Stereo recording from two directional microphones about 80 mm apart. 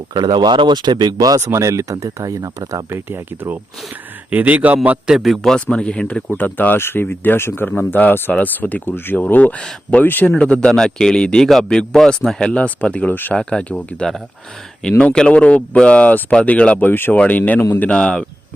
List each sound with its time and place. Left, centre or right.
0.1 s speech: right
1.4 s speech: right
2.9 s speech: right
4.3 s speech: centre
5.0 s speech: centre; by 13.3 s left
13.3 s speech: centre